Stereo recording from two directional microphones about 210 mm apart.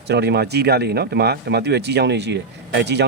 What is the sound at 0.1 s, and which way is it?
Speech, 55° right (ahead or behind).